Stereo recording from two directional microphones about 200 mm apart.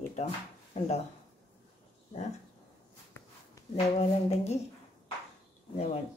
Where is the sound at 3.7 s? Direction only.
30° left (ahead or behind).